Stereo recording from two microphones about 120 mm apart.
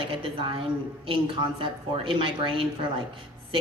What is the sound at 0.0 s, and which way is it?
A woman's voice, 45° right (ahead or behind).